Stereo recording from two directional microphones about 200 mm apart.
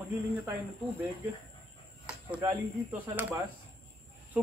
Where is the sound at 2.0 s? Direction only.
5° right (ahead or behind).